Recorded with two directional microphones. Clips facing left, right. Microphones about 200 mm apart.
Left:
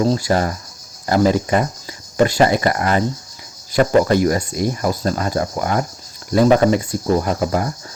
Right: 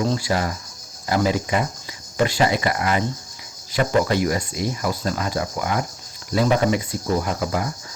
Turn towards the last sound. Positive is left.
turn(degrees=45)  # may be behind; listen again after turning